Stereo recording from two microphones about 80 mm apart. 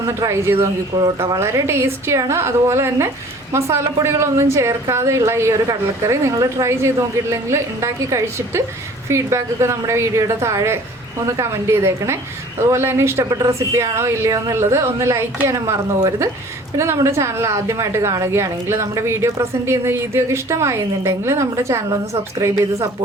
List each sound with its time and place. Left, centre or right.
0.0 s a woman's voice: right